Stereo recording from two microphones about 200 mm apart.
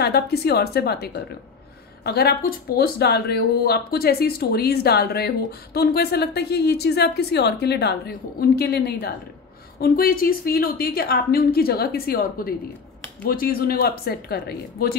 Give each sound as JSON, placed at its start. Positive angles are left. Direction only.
{"t": 0.0, "sound": "speech", "side_deg": 50}